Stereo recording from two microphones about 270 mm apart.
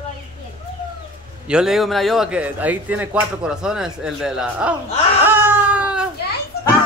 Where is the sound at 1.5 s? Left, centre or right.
Centre.